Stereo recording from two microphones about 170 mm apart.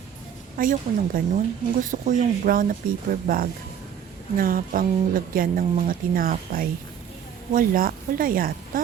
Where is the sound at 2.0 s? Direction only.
50° right (ahead or behind).